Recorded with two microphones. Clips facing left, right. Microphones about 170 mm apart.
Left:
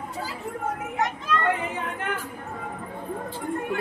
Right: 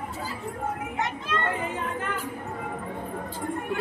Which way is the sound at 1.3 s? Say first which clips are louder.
Left 3 dB; 25° right (ahead or behind).